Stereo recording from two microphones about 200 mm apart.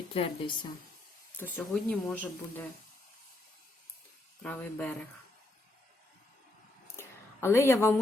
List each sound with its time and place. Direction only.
0.1 s speech: 25° left (ahead or behind)
1.4 s speech: 10° left (ahead or behind)
4.4 s speech: 5° left (ahead or behind)
7.0 s a sound: 10° left (ahead or behind)